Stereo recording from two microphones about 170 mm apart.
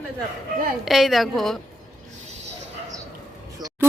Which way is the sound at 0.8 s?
Centre (ahead or behind).